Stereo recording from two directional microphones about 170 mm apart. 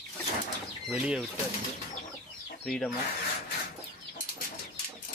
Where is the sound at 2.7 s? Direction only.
Centre (ahead or behind).